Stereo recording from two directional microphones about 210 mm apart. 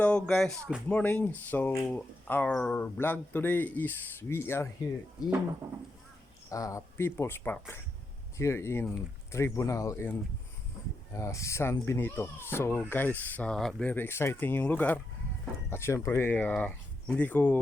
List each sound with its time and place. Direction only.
0.0 s speech: 5° left (ahead or behind)
6.5 s speech: 15° left (ahead or behind)